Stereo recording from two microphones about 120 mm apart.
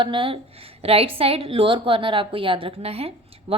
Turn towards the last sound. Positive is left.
turn(degrees=-55)  # may be behind; listen again after turning